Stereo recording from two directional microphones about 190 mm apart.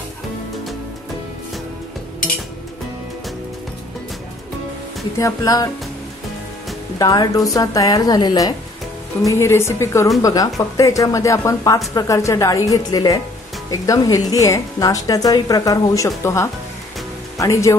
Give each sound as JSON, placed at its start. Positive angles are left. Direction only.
{"t": 5.2, "sound": "a woman's voice", "side_deg": 20}
{"t": 7.0, "sound": "a woman's voice", "side_deg": 20}